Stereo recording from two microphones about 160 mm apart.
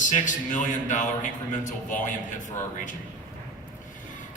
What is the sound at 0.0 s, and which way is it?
A man's voice, 50° left (ahead or behind).